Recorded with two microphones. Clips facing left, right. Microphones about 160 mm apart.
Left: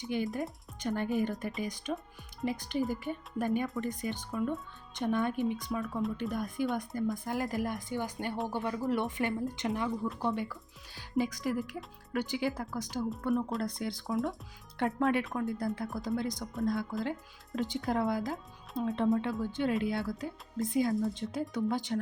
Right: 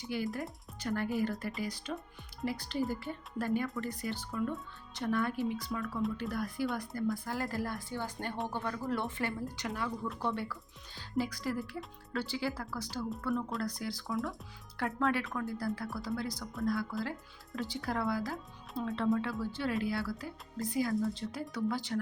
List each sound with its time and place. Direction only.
0.0 s speech: 20° left (ahead or behind)